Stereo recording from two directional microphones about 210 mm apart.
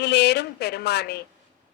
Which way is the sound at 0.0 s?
55° left (ahead or behind).